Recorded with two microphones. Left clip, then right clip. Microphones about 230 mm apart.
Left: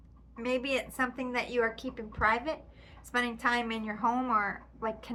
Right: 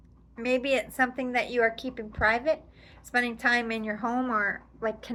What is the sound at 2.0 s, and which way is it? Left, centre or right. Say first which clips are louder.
Speech: right 2 dB; left.